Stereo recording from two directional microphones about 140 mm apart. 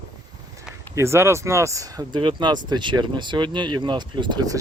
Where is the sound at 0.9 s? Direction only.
20° right (ahead or behind).